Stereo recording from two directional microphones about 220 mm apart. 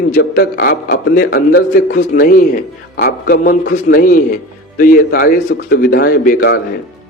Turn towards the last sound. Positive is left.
turn(degrees=45)  # may be behind; listen again after turning